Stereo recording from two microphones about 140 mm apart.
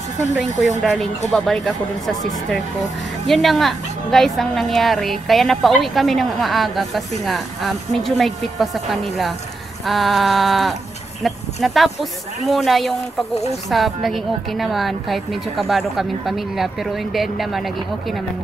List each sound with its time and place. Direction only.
0.4 s a woman's voice: centre (ahead or behind)
3.3 s a woman's voice: centre (ahead or behind)
13.3 s speech: 50° left (ahead or behind)
13.7 s a woman's voice: centre (ahead or behind)